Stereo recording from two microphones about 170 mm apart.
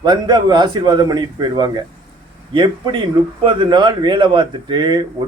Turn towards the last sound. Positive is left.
turn(degrees=-25)  # may be behind; listen again after turning